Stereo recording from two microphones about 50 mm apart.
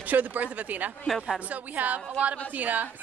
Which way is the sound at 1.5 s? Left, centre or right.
Right.